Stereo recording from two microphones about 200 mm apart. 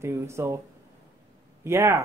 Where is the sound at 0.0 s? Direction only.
15° right (ahead or behind).